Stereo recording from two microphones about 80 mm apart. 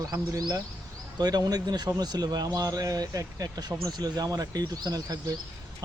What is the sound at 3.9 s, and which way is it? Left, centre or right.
Speech, right.